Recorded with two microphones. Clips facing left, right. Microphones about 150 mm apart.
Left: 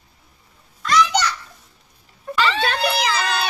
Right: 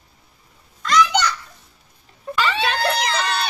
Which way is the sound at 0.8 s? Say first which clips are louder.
Even; 5° left (ahead or behind).